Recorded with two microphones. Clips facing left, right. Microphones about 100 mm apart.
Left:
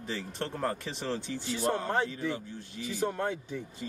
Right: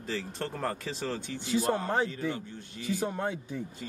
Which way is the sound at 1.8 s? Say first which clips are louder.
Right 1 dB; 15° right (ahead or behind).